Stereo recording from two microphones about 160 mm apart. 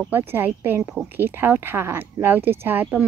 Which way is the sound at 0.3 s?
15° right (ahead or behind).